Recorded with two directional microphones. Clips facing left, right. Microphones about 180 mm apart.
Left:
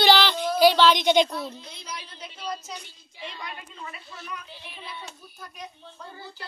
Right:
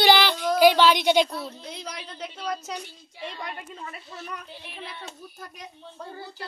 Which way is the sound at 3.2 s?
50° right (ahead or behind).